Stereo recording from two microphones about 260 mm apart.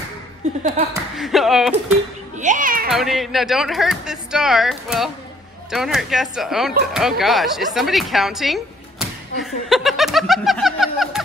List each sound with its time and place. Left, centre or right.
0.4 s speech: right
1.1 s a woman's voice: centre
2.3 s speech: right
2.9 s a woman's voice: centre